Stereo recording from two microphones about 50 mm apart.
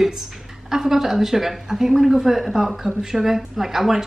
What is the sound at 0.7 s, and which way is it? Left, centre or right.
A woman's voice, centre.